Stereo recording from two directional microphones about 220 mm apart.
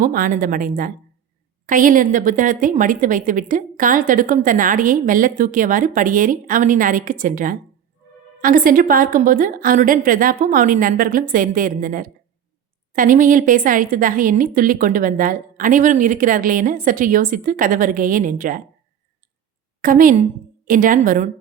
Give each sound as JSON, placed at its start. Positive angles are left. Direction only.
{"t": 0.0, "sound": "a woman's voice", "side_deg": -40}
{"t": 19.8, "sound": "a woman's voice", "side_deg": -40}